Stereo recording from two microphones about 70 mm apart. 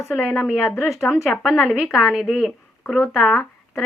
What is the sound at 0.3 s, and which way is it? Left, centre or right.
Speech, centre.